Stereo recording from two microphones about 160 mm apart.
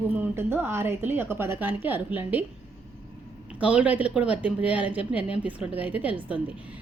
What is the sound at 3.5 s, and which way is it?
A woman's voice, 10° right (ahead or behind).